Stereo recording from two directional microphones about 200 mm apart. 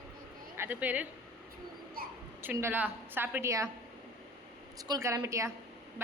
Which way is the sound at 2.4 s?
10° right (ahead or behind).